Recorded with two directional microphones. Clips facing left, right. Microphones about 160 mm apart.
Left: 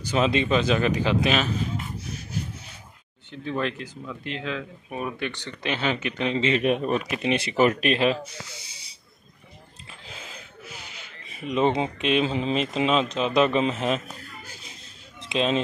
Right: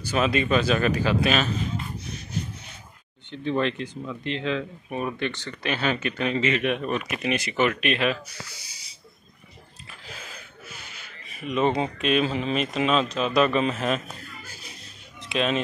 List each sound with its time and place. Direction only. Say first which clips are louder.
0.0 s speech: left 1 dB; 20° left (ahead or behind)
3.3 s speech: right 3 dB; 5° left (ahead or behind); by 6.5 s 20° left (ahead or behind)
6.5 s speech: left 3 dB; 35° left (ahead or behind)
10.0 s a sound: even; 20° left (ahead or behind)